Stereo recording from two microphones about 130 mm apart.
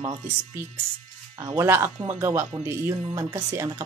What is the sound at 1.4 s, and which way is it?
Speech, 25° right (ahead or behind).